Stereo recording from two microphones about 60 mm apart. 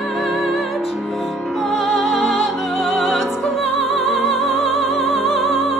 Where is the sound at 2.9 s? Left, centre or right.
Centre.